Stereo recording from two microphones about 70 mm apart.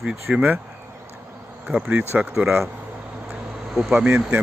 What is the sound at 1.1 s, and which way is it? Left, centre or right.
Insect, right.